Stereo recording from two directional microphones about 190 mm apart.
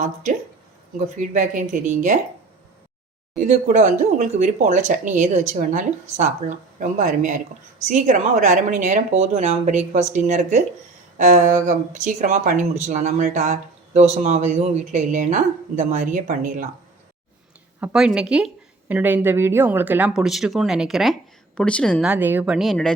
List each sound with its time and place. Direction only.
0.9 s speech: 40° right (ahead or behind)
3.3 s speech: 45° right (ahead or behind)
17.7 s a woman's voice: 5° right (ahead or behind)
22.0 s a woman's voice: 10° right (ahead or behind)